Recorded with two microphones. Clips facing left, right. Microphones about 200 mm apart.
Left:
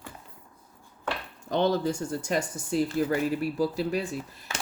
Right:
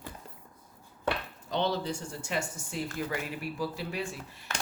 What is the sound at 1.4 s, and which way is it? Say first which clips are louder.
Speech: left 6 dB; 50° left (ahead or behind).